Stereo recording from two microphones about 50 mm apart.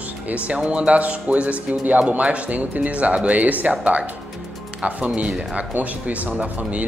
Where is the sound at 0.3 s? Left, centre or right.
Right.